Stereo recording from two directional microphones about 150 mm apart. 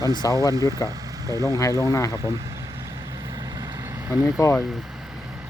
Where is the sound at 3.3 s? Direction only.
25° right (ahead or behind); by 4.4 s 10° right (ahead or behind).